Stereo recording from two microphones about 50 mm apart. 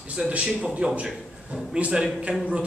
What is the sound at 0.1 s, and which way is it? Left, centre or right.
Speech, right.